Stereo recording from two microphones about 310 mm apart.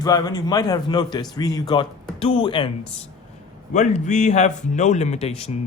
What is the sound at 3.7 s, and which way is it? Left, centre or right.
Speech, left.